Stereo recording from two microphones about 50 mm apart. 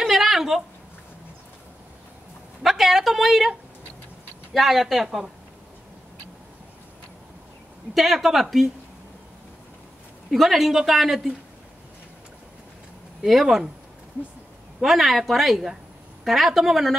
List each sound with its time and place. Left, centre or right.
0.0 s a sound: centre
2.6 s speech: centre
4.6 s speech: centre
7.9 s speech: centre
10.3 s speech: centre
13.2 s speech: centre
14.8 s speech: centre